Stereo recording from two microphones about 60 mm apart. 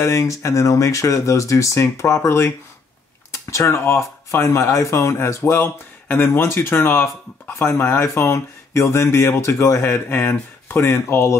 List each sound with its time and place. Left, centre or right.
0.0 s speech: left
6.1 s speech: left
9.8 s speech: left